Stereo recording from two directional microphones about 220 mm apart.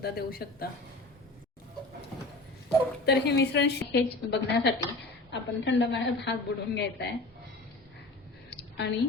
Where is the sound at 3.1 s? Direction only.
50° left (ahead or behind).